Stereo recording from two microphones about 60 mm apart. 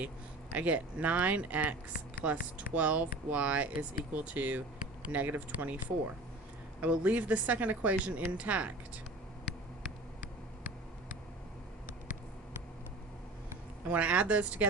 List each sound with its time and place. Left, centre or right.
0.5 s speech: right
6.8 s speech: right
13.8 s speech: right